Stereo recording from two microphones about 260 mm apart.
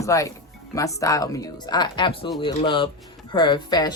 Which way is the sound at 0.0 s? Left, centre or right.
Centre.